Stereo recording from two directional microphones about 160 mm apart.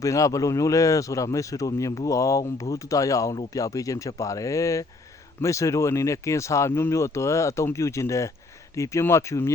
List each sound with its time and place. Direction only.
0.0 s speech: 20° left (ahead or behind)